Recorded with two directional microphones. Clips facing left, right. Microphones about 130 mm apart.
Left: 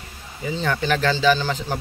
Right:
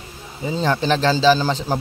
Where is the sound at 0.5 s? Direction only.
30° right (ahead or behind).